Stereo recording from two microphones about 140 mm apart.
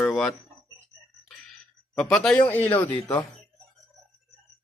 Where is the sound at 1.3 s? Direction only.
5° left (ahead or behind).